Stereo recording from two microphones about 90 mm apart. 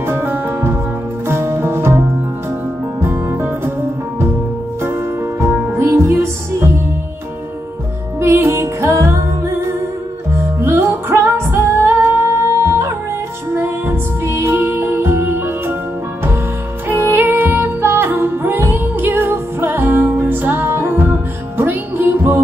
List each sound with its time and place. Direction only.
0.0 s music: 25° right (ahead or behind)
5.4 s music: 20° right (ahead or behind)
8.2 s music: 25° right (ahead or behind)
16.8 s music: 20° right (ahead or behind)